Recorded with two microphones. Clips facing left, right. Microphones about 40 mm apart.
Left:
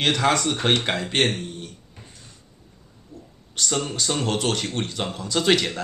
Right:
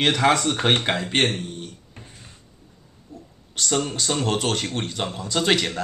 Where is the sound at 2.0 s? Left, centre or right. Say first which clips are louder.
Right 2 dB; right.